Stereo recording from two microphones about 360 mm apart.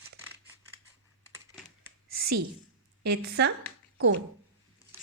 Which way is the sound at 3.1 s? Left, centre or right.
Right.